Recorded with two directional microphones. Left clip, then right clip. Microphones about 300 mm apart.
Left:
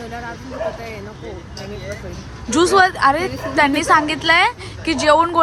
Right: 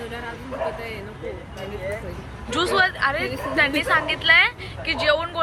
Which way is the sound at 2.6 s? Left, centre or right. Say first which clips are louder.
Left 7 dB; left.